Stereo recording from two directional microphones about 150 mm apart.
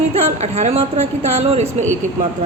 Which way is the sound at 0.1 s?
45° right (ahead or behind).